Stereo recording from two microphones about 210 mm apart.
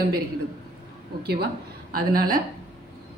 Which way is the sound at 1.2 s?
50° right (ahead or behind).